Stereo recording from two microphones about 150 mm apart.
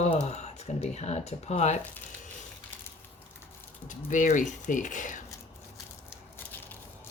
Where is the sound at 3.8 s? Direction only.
55° left (ahead or behind).